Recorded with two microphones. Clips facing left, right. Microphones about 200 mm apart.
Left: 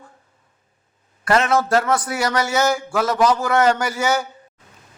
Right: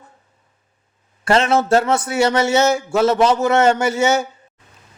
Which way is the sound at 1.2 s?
25° right (ahead or behind).